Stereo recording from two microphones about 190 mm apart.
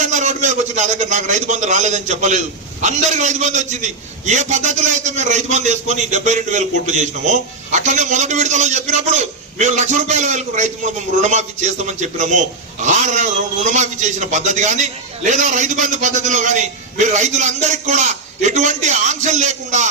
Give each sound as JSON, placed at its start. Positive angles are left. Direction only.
{"t": 0.0, "sound": "a man's voice", "side_deg": -40}